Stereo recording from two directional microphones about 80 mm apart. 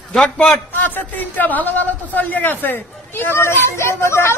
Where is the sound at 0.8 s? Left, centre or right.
Left.